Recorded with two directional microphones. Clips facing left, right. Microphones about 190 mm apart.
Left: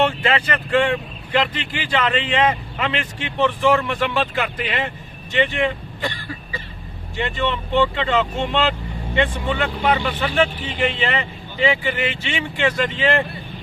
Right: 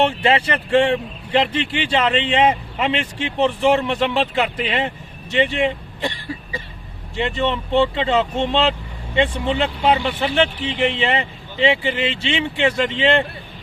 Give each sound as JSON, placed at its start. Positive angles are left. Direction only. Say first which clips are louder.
{"t": 0.0, "sound": "speech", "louder": "right 2 dB", "side_deg": -25}
{"t": 9.1, "sound": "speech", "louder": "right 2 dB", "side_deg": -25}